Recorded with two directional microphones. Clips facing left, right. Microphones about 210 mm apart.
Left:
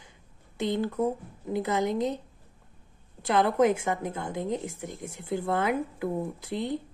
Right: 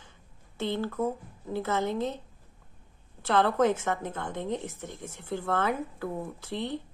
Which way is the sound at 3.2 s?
15° left (ahead or behind).